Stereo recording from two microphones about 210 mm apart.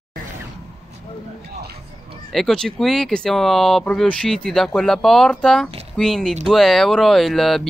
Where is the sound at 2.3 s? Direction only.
Centre (ahead or behind).